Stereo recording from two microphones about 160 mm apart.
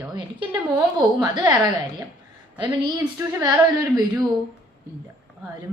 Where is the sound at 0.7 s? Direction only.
25° right (ahead or behind).